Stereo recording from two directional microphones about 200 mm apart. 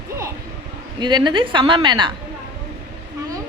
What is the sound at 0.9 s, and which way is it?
A woman's voice, 20° right (ahead or behind).